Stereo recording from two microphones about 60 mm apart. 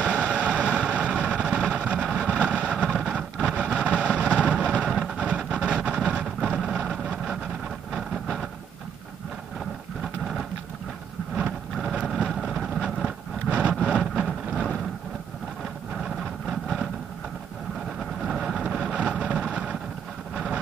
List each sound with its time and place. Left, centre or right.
0.2 s vehicle: centre
7.9 s train: centre
11.3 s vehicle: centre
13.5 s a sound: centre
15.9 s vehicle: centre
18.2 s vehicle: centre
20.3 s a sound: centre